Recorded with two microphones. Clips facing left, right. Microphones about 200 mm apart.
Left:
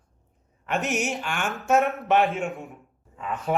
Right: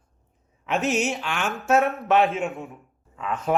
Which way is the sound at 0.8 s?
15° left (ahead or behind).